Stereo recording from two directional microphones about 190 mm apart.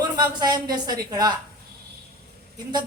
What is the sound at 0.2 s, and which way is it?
Speech, 20° right (ahead or behind).